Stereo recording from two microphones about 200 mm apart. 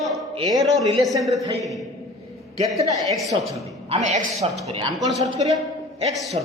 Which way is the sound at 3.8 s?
30° right (ahead or behind).